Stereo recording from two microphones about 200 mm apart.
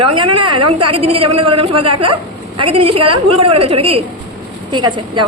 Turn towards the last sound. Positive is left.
turn(degrees=-20)  # may be behind; listen again after turning